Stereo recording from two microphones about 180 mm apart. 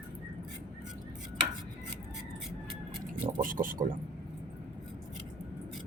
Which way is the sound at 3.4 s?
50° right (ahead or behind).